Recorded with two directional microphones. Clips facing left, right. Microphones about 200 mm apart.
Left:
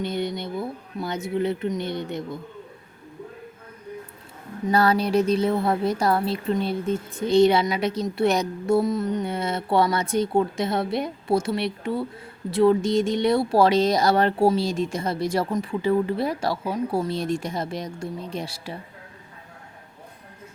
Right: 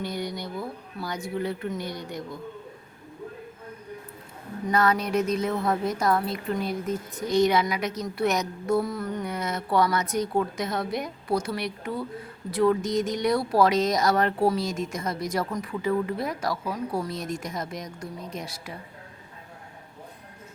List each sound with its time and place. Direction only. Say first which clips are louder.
0.0 s a woman's voice: left 4 dB; 25° left (ahead or behind)
4.7 s a woman's voice: left 4 dB; 30° left (ahead or behind)